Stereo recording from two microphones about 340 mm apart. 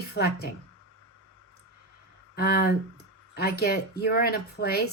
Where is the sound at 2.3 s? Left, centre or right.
Left.